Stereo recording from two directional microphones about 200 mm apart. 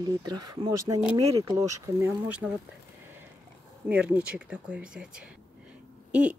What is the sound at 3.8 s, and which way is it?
Speech, 5° right (ahead or behind).